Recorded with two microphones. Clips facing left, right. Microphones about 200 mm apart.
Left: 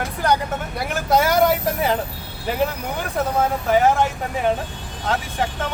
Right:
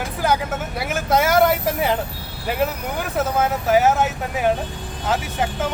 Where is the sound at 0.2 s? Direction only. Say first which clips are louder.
Even; 5° right (ahead or behind).